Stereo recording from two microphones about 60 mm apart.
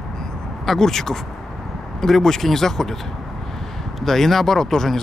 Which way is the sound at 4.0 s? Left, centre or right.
Centre.